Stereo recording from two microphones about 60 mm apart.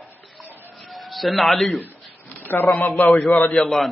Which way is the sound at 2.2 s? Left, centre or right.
Left.